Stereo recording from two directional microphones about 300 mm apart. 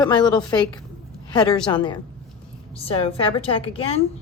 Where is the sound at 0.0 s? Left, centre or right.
Centre.